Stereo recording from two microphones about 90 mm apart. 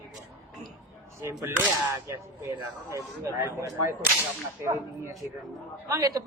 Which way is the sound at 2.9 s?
35° right (ahead or behind).